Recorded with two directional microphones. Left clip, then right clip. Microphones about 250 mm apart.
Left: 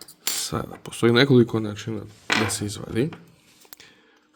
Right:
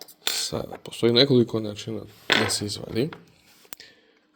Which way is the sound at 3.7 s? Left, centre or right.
Centre.